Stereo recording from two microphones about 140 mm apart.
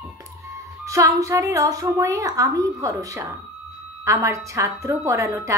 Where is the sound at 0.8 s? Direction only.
25° right (ahead or behind).